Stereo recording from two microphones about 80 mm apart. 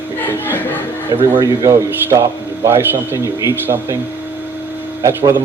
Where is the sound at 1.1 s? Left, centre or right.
Right.